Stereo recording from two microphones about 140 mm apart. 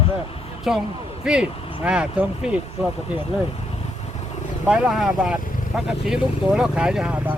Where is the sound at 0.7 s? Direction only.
5° right (ahead or behind).